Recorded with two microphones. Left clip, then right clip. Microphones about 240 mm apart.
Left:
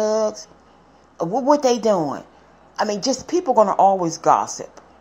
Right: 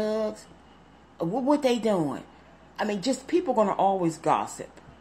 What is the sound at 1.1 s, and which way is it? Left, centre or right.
A woman's voice, centre.